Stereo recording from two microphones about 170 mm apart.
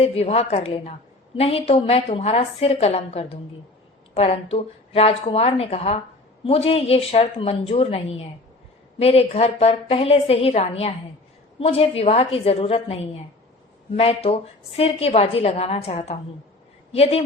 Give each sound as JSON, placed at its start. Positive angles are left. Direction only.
{"t": 0.0, "sound": "a woman's voice", "side_deg": 35}